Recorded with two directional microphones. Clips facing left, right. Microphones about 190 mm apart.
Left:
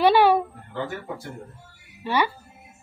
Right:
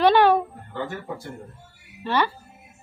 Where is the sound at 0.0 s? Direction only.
10° left (ahead or behind).